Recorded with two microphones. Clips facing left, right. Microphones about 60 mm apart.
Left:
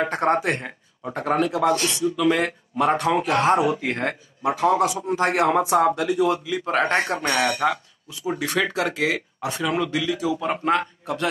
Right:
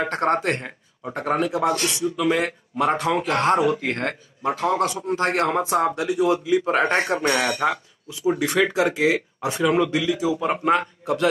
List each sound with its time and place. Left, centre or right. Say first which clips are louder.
0.1 s speech: even; centre
5.5 s speech: left 3 dB; centre
7.3 s speech: even; right
10.4 s speech: right 2 dB; centre